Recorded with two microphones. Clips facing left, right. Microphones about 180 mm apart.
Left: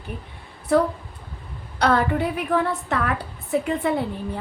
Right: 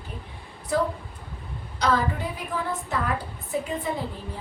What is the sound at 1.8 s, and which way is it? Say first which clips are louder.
A woman's voice: left 5 dB; 65° left (ahead or behind).